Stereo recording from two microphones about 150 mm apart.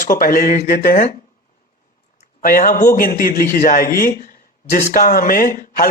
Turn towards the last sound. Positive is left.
turn(degrees=70)  # may be behind; listen again after turning